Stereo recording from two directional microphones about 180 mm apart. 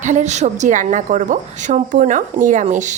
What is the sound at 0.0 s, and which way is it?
A woman's voice, 40° right (ahead or behind).